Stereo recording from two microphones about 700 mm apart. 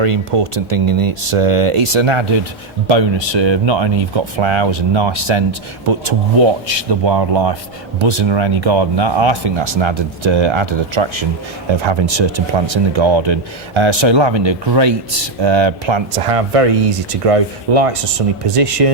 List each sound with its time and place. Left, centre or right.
0.0 s speech: right